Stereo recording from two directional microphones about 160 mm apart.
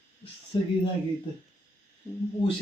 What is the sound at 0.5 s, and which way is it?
Speech, 30° left (ahead or behind).